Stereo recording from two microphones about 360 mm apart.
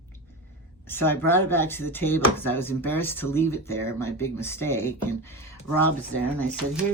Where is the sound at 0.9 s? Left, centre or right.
Centre.